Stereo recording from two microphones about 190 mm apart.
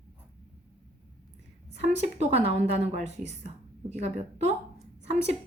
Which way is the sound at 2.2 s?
35° right (ahead or behind).